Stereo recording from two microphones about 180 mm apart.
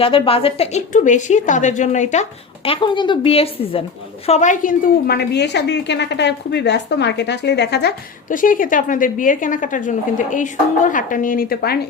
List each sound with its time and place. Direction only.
0.0 s a woman's voice: 30° left (ahead or behind)
2.6 s a woman's voice: 25° left (ahead or behind)
4.3 s a woman's voice: 40° left (ahead or behind); by 7.9 s 65° left (ahead or behind)
8.3 s a woman's voice: 50° left (ahead or behind)